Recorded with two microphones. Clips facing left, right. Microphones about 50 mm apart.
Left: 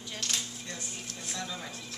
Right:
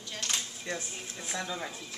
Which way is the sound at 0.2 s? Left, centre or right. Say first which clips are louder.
Right 1 dB; right.